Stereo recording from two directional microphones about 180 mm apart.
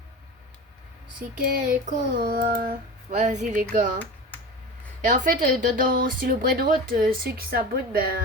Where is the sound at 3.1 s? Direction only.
40° right (ahead or behind).